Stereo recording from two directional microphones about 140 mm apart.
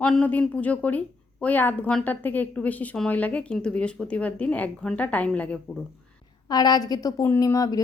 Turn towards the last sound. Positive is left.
turn(degrees=25)  # may be behind; listen again after turning